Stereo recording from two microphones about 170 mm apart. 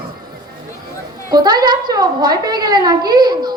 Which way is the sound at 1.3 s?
25° right (ahead or behind).